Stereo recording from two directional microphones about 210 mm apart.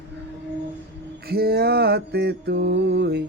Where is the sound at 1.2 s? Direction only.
45° right (ahead or behind).